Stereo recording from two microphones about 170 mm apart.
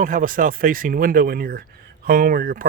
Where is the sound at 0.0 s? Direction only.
50° right (ahead or behind).